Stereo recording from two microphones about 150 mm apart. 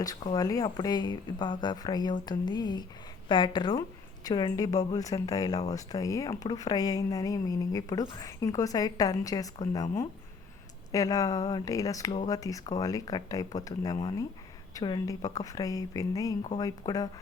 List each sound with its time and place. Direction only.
0.3 s a woman's voice: 25° left (ahead or behind)
10.9 s a woman's voice: 25° left (ahead or behind)